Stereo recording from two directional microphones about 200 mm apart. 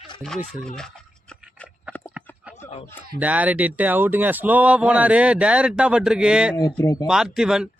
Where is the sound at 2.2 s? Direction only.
5° right (ahead or behind).